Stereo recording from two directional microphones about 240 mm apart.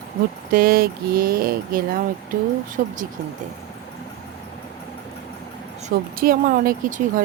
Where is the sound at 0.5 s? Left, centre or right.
Right.